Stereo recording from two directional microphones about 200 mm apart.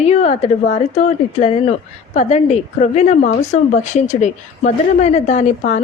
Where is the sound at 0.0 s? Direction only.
35° left (ahead or behind).